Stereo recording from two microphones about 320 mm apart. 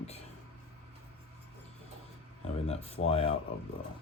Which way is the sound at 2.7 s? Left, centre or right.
Centre.